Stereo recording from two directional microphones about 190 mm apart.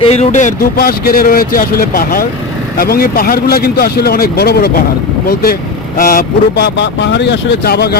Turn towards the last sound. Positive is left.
turn(degrees=55)  # may be behind; listen again after turning